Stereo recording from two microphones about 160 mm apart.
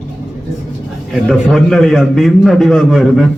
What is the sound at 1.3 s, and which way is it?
A man's voice, centre (ahead or behind).